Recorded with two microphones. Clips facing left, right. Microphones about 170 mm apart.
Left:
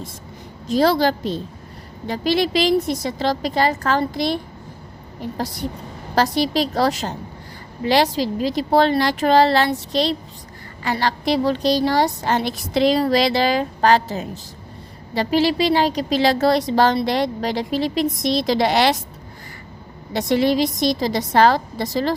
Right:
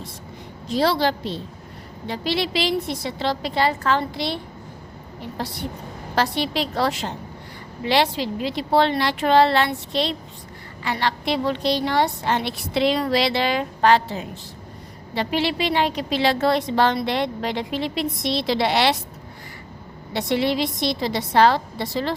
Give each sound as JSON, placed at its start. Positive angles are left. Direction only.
{"t": 0.7, "sound": "a woman's voice", "side_deg": 45}
{"t": 6.1, "sound": "a woman's voice", "side_deg": 40}
{"t": 20.1, "sound": "a woman's voice", "side_deg": 40}